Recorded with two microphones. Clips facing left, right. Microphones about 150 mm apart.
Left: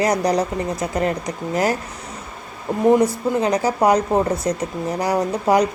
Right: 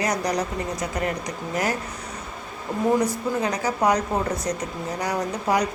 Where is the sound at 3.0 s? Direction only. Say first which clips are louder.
Left 5 dB; 30° left (ahead or behind).